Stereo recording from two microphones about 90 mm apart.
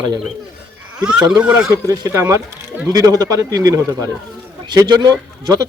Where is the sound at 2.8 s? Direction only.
40° right (ahead or behind).